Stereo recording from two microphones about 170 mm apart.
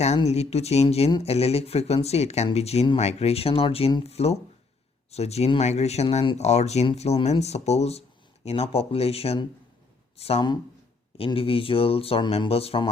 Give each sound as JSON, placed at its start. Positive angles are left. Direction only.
{"t": 0.3, "sound": "speech", "side_deg": 40}